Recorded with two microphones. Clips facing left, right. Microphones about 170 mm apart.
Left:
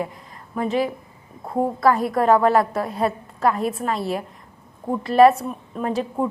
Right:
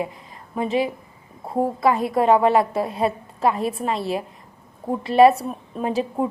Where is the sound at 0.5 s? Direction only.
25° right (ahead or behind).